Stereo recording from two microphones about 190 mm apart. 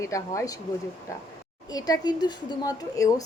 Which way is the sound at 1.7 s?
20° left (ahead or behind).